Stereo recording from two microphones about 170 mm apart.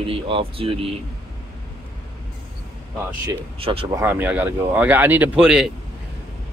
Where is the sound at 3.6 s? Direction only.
35° right (ahead or behind).